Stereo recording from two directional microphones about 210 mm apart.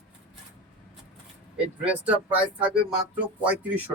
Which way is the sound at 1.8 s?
5° right (ahead or behind).